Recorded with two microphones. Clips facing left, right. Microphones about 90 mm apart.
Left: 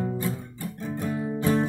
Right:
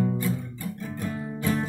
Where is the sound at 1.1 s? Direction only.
10° left (ahead or behind).